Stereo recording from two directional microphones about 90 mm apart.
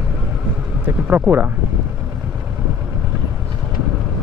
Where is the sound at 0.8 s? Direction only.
20° right (ahead or behind).